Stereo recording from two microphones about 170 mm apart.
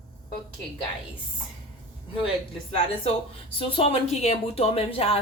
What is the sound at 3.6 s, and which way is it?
A woman's voice, 35° left (ahead or behind).